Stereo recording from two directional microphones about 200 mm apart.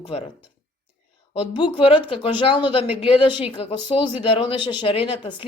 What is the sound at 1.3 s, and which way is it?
A woman's voice, 25° left (ahead or behind).